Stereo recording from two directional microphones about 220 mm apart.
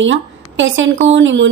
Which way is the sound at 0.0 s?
60° right (ahead or behind).